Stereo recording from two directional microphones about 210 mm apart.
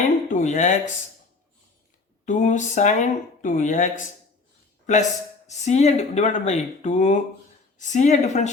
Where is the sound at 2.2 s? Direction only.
35° left (ahead or behind).